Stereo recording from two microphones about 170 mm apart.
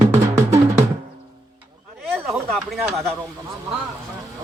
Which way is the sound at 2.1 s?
5° right (ahead or behind).